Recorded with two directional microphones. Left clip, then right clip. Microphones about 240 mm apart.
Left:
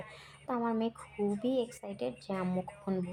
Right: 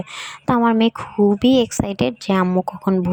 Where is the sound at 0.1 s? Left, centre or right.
Right.